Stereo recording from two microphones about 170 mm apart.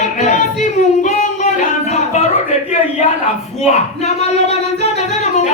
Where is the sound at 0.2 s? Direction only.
45° left (ahead or behind).